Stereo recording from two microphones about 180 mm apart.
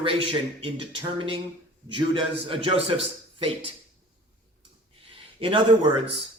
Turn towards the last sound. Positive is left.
turn(degrees=-30)  # may be behind; listen again after turning